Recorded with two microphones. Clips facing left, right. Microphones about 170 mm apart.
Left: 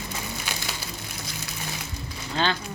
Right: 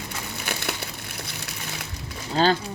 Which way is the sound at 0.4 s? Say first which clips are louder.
Right 3 dB; 60° right (ahead or behind).